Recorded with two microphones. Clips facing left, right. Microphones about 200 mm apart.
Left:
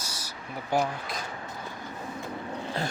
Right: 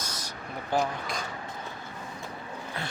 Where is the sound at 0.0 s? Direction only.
10° left (ahead or behind).